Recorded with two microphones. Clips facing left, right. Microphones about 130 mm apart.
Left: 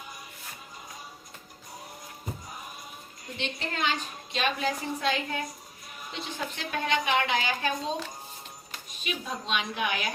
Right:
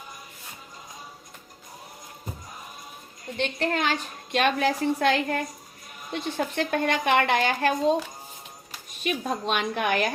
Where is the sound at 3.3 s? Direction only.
60° right (ahead or behind).